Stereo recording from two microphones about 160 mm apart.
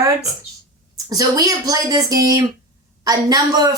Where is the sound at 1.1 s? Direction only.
20° right (ahead or behind).